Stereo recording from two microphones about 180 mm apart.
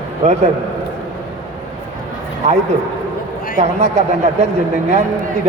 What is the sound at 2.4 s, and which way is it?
Speech, 40° right (ahead or behind).